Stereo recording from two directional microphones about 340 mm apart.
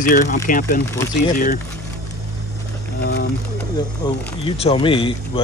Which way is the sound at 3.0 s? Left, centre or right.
Left.